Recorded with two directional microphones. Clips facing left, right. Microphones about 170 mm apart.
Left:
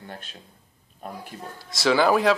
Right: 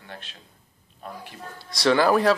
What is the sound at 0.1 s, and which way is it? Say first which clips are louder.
Speech: right 2 dB; 45° left (ahead or behind).